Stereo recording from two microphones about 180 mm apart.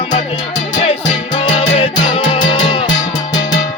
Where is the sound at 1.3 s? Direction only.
25° left (ahead or behind).